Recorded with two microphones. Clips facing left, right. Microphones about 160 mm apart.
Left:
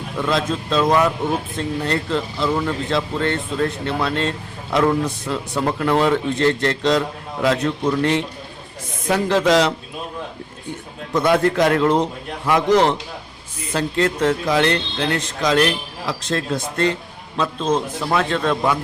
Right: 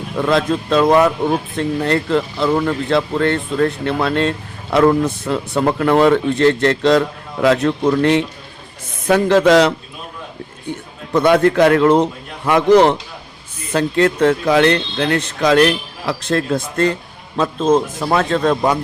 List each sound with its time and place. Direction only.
0.2 s speech: 60° right (ahead or behind)
5.3 s speech: 60° right (ahead or behind)
11.1 s a man's voice: 65° right (ahead or behind); by 18.8 s 40° right (ahead or behind)